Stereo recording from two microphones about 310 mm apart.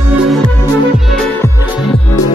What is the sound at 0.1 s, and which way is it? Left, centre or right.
Music, centre.